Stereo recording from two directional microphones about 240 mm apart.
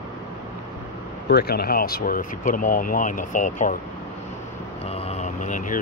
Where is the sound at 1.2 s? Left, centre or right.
Left.